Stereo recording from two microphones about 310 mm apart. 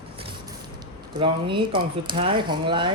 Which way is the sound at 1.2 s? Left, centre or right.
Centre.